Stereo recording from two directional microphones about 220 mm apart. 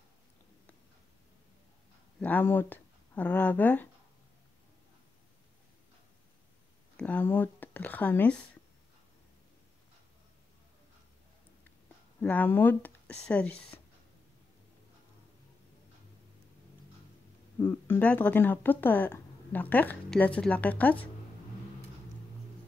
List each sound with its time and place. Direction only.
2.1 s speech: 10° left (ahead or behind)
7.0 s speech: 10° left (ahead or behind)
12.2 s speech: 5° left (ahead or behind)
13.7 s whispering: 10° left (ahead or behind)
17.6 s speech: 10° left (ahead or behind)